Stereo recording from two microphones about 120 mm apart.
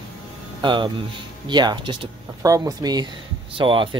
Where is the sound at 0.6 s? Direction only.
40° right (ahead or behind).